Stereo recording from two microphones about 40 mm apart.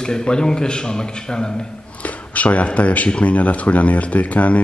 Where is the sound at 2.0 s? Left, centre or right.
Left.